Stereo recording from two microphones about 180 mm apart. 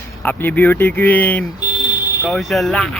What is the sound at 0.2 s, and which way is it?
Speech, 10° left (ahead or behind).